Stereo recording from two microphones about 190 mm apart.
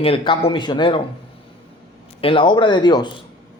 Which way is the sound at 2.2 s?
25° left (ahead or behind).